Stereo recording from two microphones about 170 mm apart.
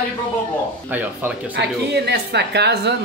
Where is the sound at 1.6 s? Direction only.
80° right.